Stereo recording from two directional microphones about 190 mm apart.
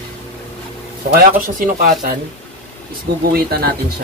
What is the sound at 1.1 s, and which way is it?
Speech, 50° right (ahead or behind).